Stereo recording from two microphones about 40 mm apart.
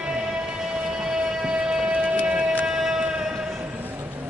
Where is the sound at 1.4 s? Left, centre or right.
Right.